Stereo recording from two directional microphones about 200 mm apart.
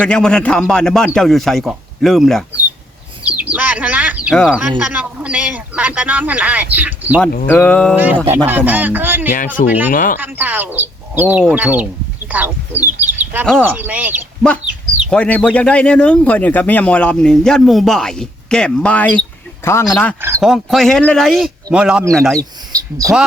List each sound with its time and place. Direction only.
0.0 s speech: 5° left (ahead or behind)
7.4 s a sound: 5° left (ahead or behind)
8.4 s speech: 10° right (ahead or behind)
9.3 s speech: 40° left (ahead or behind)
10.2 s speech: 10° right (ahead or behind)
13.4 s speech: 5° left (ahead or behind)
13.7 s speech: 10° right (ahead or behind)
15.1 s speech: 5° left (ahead or behind)
22.4 s speech: 15° right (ahead or behind)